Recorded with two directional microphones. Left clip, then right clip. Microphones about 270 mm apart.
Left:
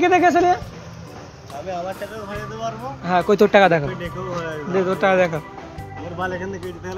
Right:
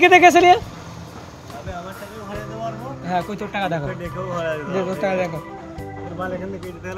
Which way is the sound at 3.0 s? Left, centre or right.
Centre.